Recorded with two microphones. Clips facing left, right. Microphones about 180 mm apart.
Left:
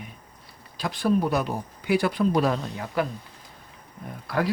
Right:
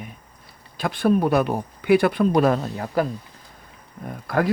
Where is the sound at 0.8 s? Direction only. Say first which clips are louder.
Right 4 dB; 55° right (ahead or behind).